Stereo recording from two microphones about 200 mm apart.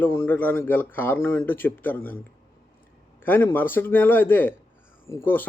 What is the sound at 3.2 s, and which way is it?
Speech, 10° left (ahead or behind).